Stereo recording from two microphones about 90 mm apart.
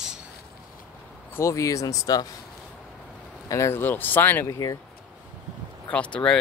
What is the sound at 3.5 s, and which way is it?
Speech, 30° left (ahead or behind).